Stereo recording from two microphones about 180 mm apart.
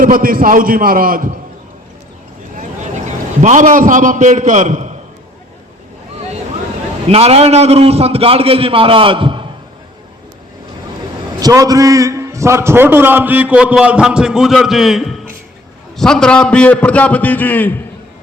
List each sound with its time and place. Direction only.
0.0 s a man's voice: 50° right (ahead or behind)
3.4 s a man's voice: 45° right (ahead or behind)
7.1 s a man's voice: 35° right (ahead or behind)
11.3 s a man's voice: 20° right (ahead or behind); by 17.7 s 10° left (ahead or behind)